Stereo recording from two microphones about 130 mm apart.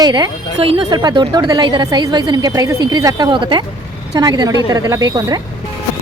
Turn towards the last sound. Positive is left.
turn(degrees=-30)  # may be behind; listen again after turning